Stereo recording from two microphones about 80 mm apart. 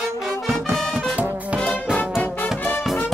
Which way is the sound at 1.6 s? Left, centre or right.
Centre.